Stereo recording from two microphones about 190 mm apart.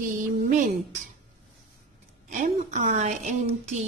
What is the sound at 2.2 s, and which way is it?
A woman's voice, 40° right (ahead or behind).